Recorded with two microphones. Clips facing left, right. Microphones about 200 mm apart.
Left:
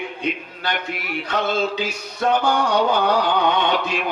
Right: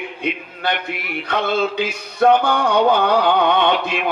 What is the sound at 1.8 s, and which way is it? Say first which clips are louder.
A man's voice: right 6 dB; 55° right (ahead or behind).